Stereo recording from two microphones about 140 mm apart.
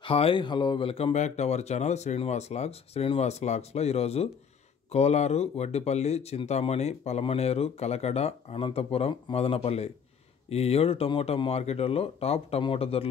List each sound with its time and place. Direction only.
0.0 s speech: 40° left (ahead or behind)
1.1 s speech: 55° left (ahead or behind)